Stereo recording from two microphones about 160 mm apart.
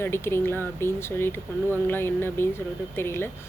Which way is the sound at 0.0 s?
15° left (ahead or behind).